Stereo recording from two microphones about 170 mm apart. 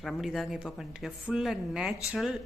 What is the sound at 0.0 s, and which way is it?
Speech, centre (ahead or behind).